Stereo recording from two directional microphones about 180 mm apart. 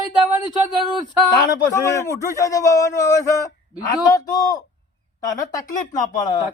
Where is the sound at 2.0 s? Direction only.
20° left (ahead or behind).